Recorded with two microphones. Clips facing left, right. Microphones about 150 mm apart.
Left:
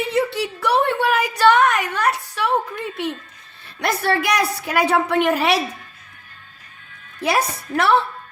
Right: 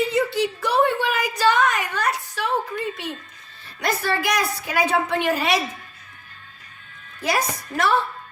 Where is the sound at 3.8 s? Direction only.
65° left (ahead or behind).